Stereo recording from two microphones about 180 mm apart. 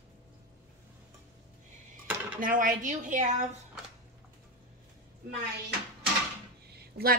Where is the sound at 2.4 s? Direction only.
50° right (ahead or behind).